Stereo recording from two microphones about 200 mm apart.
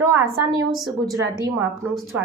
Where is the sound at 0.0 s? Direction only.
15° right (ahead or behind).